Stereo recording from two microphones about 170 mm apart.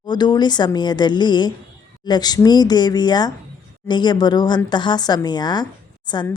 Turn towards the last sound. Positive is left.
turn(degrees=25)  # may be behind; listen again after turning